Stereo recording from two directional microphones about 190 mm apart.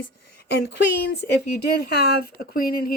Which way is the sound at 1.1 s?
55° left (ahead or behind).